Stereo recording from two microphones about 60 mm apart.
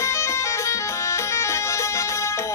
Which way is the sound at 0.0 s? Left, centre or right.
Left.